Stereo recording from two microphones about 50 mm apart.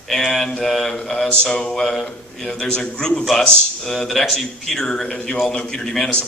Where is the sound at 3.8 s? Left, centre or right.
Centre.